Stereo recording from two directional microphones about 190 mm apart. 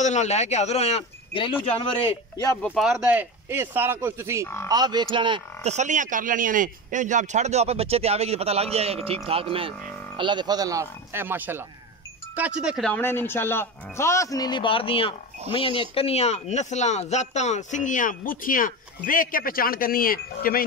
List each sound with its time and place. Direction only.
0.0 s speech: 35° left (ahead or behind); by 2.6 s 20° left (ahead or behind)
2.6 s speech: centre (ahead or behind); by 20.6 s 50° left (ahead or behind)